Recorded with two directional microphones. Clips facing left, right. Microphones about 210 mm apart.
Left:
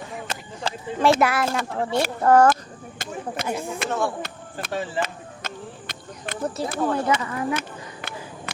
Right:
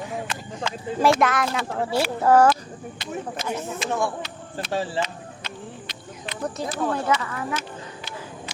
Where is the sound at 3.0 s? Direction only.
60° left (ahead or behind).